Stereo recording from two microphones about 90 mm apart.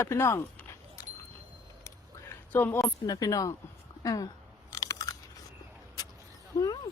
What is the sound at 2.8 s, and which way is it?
Speech, 40° left (ahead or behind).